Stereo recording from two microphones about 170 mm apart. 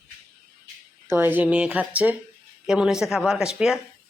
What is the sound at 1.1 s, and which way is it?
Speech, 10° right (ahead or behind).